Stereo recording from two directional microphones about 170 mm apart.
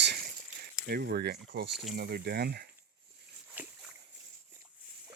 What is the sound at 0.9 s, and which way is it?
Speech, 70° right (ahead or behind).